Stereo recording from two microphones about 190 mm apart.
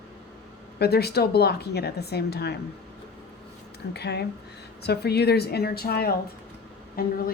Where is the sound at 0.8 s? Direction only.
55° left (ahead or behind).